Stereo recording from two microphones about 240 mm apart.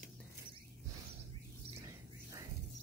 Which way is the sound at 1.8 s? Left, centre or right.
Centre.